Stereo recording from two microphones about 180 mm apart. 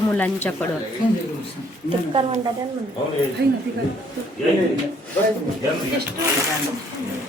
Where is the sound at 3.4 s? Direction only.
65° right (ahead or behind).